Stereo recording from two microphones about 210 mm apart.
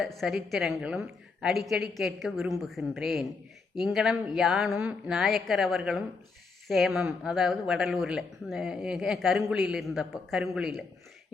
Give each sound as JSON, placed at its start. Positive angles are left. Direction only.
{"t": 0.0, "sound": "speech", "side_deg": 0}